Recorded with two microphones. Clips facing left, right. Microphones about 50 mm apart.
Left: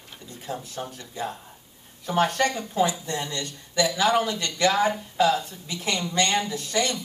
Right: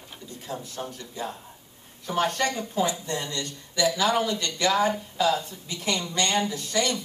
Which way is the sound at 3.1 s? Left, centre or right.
Left.